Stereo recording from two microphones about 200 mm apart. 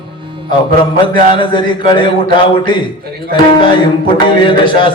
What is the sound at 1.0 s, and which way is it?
A man's voice, 25° left (ahead or behind).